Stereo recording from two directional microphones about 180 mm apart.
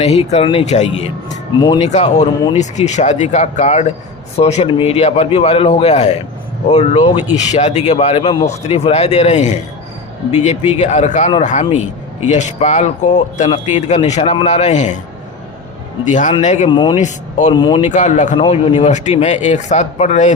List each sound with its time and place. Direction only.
0.0 s speech: 35° left (ahead or behind)
1.5 s speech: 25° left (ahead or behind)
1.8 s speech: 40° left (ahead or behind)
16.0 s speech: 45° left (ahead or behind)
16.6 s speech: 25° left (ahead or behind)
17.0 s speech: 40° left (ahead or behind)
17.5 s speech: 25° left (ahead or behind)
17.8 s speech: 40° left (ahead or behind)
18.3 s speech: 30° left (ahead or behind)